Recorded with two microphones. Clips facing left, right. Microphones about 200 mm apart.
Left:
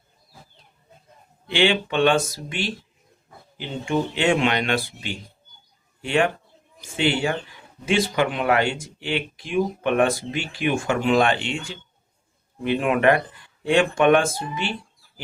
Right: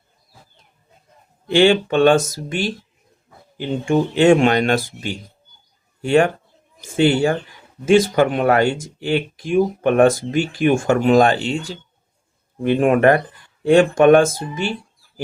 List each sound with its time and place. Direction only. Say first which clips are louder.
1.5 s speech: right 7 dB; 45° right (ahead or behind)
3.8 s speech: right 8 dB; 45° right (ahead or behind)